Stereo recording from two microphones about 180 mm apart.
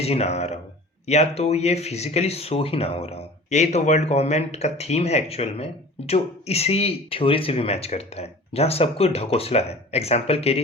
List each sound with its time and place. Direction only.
0.0 s speech: 35° left (ahead or behind)